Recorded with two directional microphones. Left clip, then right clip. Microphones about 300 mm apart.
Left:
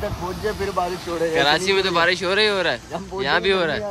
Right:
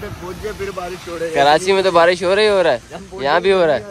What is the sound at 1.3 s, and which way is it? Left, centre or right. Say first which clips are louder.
Speech: right 6 dB; centre.